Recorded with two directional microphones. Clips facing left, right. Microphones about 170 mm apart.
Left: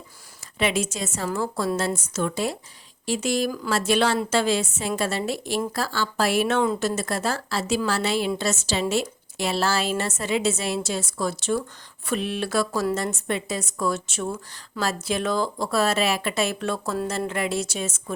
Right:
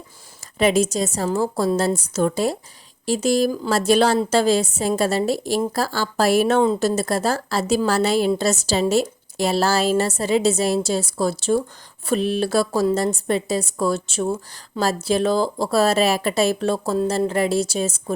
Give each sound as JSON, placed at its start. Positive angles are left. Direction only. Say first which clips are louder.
{"t": 0.6, "sound": "a woman's voice", "louder": "right 7 dB", "side_deg": -40}